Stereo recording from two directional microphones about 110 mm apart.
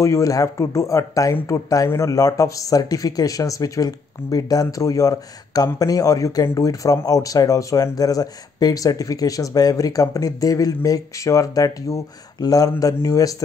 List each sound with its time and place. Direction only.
0.0 s speech: 30° left (ahead or behind)